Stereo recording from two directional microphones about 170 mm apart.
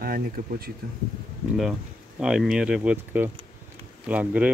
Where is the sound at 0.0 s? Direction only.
60° right (ahead or behind).